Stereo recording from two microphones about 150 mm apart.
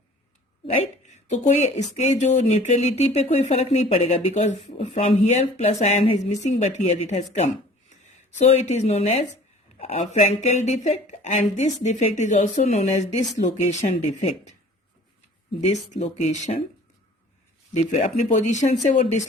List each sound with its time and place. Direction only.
1.1 s a woman's voice: 50° left (ahead or behind)
15.6 s speech: 50° left (ahead or behind)
18.0 s speech: 55° left (ahead or behind)